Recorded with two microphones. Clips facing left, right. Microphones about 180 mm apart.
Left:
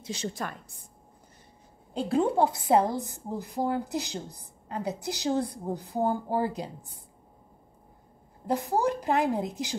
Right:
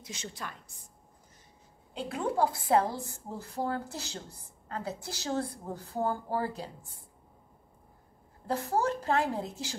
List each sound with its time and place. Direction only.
0.0 s a woman's voice: 35° left (ahead or behind)
2.0 s a woman's voice: 30° left (ahead or behind)
8.5 s a woman's voice: 15° left (ahead or behind)